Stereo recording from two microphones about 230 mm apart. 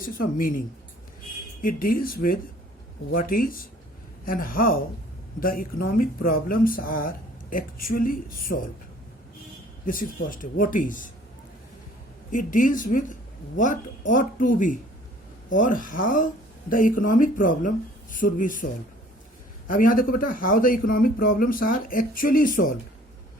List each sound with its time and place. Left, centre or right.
0.0 s speech: left
1.6 s speech: left
9.8 s speech: left
12.3 s speech: left